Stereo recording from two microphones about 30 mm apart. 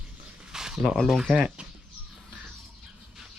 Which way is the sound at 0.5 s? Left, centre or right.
Right.